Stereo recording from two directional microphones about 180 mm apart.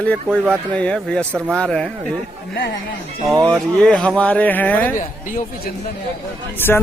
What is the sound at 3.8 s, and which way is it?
Speech, 5° left (ahead or behind).